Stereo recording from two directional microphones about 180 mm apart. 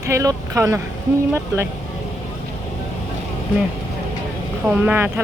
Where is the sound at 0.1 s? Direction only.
15° right (ahead or behind).